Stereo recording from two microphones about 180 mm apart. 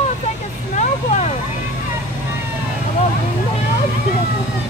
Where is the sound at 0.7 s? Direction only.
40° left (ahead or behind).